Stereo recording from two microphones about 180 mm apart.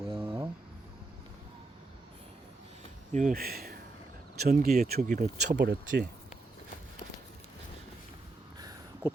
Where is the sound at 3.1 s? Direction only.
50° right (ahead or behind).